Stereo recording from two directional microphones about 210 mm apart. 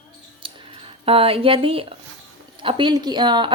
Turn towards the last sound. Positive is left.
turn(degrees=-20)  # may be behind; listen again after turning